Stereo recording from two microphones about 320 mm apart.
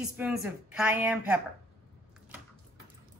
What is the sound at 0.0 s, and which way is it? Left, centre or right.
A woman's voice, centre.